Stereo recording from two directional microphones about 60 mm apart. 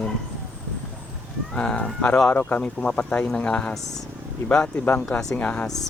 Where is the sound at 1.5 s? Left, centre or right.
Centre.